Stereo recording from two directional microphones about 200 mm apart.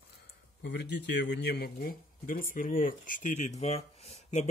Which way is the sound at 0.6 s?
60° left (ahead or behind).